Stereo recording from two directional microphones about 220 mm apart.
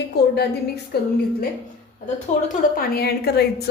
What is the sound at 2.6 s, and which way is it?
A woman's voice, 45° left (ahead or behind).